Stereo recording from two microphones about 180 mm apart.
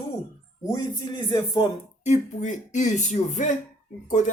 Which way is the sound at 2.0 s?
40° left (ahead or behind).